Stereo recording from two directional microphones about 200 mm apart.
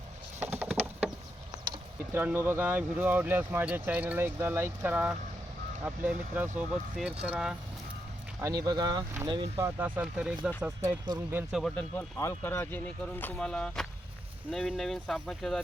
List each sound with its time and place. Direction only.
0.3 s a sound: 10° right (ahead or behind)
2.1 s speech: 10° right (ahead or behind)
8.4 s speech: 15° right (ahead or behind)
9.6 s speech: 10° right (ahead or behind)
10.8 s speech: 20° right (ahead or behind)
11.6 s speech: 5° left (ahead or behind)